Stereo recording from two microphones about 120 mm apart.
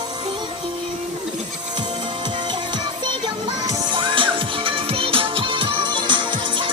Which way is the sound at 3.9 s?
45° right (ahead or behind).